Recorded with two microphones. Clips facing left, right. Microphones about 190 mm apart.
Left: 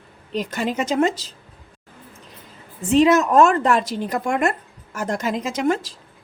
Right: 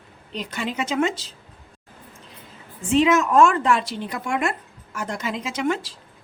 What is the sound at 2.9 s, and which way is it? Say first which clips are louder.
A woman's voice: left 3 dB; 40° left (ahead or behind).